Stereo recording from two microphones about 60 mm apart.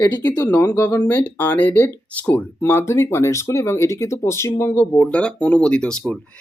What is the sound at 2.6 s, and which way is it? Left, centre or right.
Speech, left.